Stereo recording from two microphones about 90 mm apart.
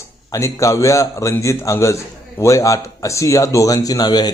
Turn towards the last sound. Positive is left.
turn(degrees=50)  # may be behind; listen again after turning